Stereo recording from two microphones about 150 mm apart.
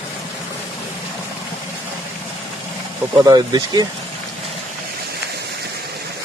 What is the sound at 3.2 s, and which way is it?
Speech, 25° right (ahead or behind).